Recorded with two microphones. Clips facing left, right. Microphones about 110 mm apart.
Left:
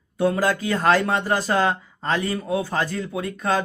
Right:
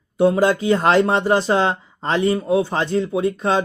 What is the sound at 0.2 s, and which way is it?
A man's voice, 20° right (ahead or behind).